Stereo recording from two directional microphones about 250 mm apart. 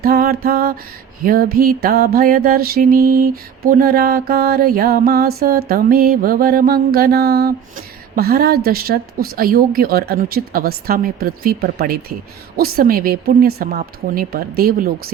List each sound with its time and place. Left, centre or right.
0.0 s a woman's voice: right